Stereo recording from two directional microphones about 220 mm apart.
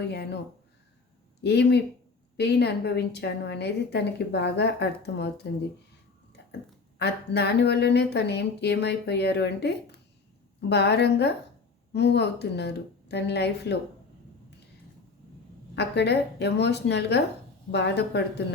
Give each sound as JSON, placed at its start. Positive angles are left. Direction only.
{"t": 0.0, "sound": "a woman's voice", "side_deg": 50}
{"t": 1.4, "sound": "a woman's voice", "side_deg": 50}
{"t": 7.0, "sound": "a woman's voice", "side_deg": 50}
{"t": 15.7, "sound": "a woman's voice", "side_deg": 50}